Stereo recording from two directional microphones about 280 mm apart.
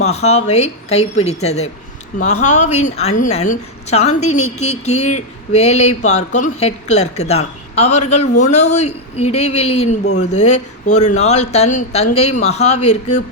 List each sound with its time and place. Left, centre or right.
0.0 s speech: left